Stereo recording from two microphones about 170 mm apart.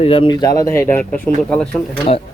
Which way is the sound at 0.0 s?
30° left (ahead or behind).